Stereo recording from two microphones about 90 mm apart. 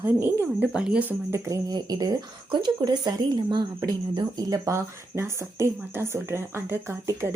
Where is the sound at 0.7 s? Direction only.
10° right (ahead or behind).